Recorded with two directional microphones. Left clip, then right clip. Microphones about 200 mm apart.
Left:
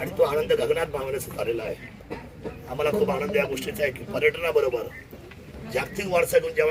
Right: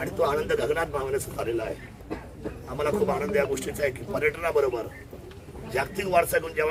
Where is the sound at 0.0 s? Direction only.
10° right (ahead or behind).